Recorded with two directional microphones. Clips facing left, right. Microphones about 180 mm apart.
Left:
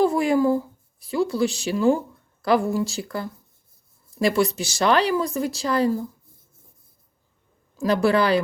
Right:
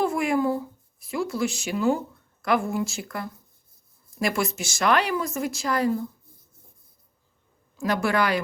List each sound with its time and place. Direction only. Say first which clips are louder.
0.0 s speech: left 4 dB; 35° left (ahead or behind)
7.8 s speech: left 4 dB; 30° left (ahead or behind)